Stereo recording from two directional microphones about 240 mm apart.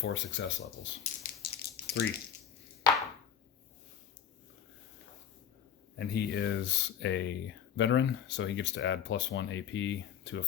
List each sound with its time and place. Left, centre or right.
0.0 s speech: left
1.2 s a sound: left
6.0 s speech: left